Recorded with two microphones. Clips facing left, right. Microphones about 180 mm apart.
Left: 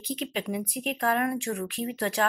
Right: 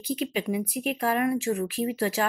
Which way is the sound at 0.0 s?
5° right (ahead or behind).